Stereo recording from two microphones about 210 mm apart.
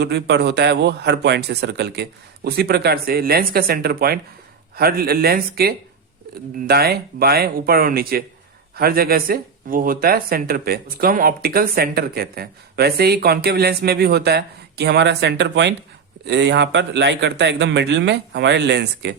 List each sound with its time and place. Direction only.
0.0 s speech: 55° right (ahead or behind)